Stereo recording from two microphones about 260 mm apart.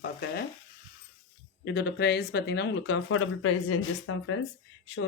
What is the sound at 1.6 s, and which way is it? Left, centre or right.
Speech, left.